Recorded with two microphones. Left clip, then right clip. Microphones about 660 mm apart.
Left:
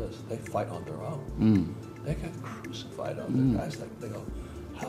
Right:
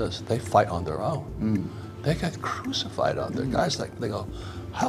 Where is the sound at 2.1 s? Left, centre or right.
Right.